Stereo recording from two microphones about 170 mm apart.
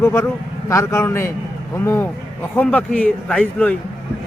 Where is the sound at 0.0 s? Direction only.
10° left (ahead or behind).